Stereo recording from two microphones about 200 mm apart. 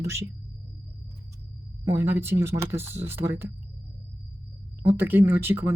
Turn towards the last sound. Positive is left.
turn(degrees=-10)  # may be behind; listen again after turning